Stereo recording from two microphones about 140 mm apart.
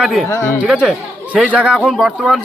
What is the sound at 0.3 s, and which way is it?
Speech, 20° left (ahead or behind).